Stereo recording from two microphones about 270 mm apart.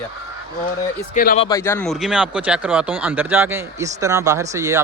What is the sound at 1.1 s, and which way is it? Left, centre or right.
Speech, left.